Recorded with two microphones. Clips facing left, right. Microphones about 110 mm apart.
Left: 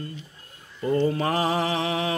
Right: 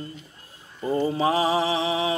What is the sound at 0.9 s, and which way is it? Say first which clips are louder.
Mantra: right 1 dB; 15° right (ahead or behind).